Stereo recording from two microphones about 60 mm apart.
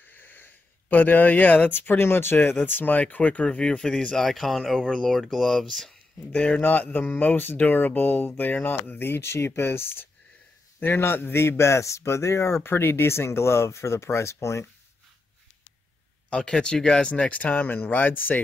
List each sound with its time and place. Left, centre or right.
0.0 s a sound: left
1.7 s speech: left; by 5.2 s centre
5.2 s speech: centre
6.3 s speech: centre
6.6 s a man's voice: left
16.3 s speech: centre